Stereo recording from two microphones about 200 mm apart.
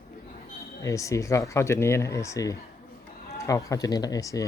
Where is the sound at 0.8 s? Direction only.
15° left (ahead or behind).